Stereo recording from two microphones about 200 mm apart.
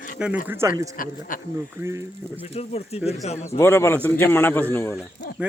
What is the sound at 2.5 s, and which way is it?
Speech, 30° left (ahead or behind).